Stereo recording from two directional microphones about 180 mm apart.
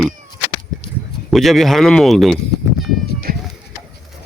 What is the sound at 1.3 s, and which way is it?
Speech, centre (ahead or behind).